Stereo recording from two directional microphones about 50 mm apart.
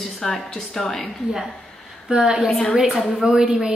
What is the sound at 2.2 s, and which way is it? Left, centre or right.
Speech, centre.